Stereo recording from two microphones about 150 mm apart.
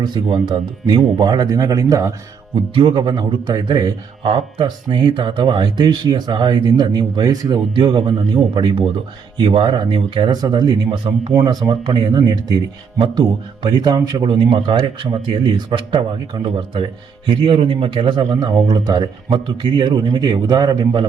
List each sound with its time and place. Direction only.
0.0 s speech: 30° right (ahead or behind)
2.7 s a man's voice: 35° right (ahead or behind)
11.3 s a man's voice: 20° right (ahead or behind)